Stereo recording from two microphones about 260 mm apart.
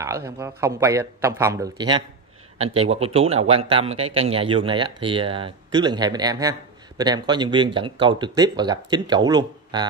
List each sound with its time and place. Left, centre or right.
0.0 s speech: centre